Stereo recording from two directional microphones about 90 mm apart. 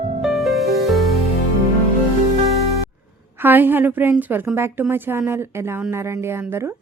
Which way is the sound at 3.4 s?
20° right (ahead or behind).